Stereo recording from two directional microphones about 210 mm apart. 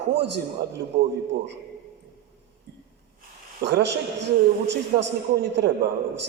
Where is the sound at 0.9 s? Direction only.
35° right (ahead or behind).